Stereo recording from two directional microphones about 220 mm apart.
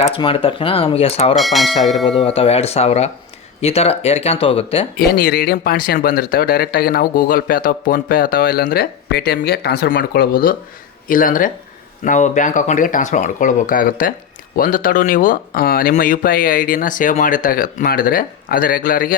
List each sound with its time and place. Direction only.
0.0 s speech: 25° left (ahead or behind)
1.4 s a sound: centre (ahead or behind)
2.2 s speech: 25° left (ahead or behind)
4.9 s speech: 45° left (ahead or behind)